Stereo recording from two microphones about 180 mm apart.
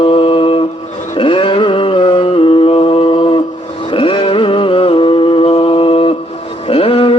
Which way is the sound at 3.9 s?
30° left (ahead or behind).